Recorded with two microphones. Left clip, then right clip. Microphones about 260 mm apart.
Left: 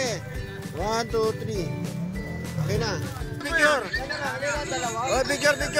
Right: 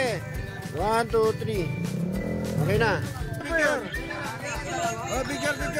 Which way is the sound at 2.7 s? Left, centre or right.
Centre.